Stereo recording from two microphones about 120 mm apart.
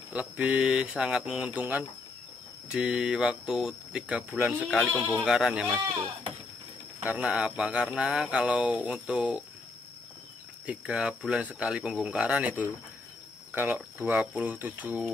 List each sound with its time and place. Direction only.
0.1 s speech: 10° right (ahead or behind)
4.9 s speech: 20° left (ahead or behind)
5.2 s speech: 5° right (ahead or behind)
7.0 s speech: 10° right (ahead or behind)
10.7 s speech: 5° right (ahead or behind)